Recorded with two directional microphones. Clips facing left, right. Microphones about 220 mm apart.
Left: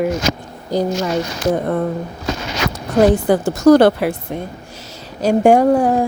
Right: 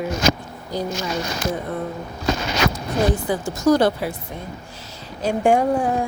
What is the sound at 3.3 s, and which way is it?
Speech, 65° left (ahead or behind).